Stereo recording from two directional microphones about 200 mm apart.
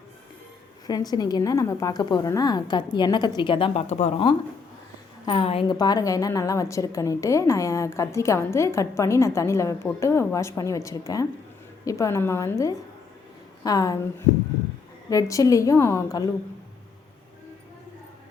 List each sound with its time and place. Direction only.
0.9 s a woman's voice: 20° left (ahead or behind)